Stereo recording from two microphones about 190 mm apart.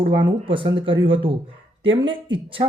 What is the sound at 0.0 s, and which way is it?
Speech, 25° right (ahead or behind).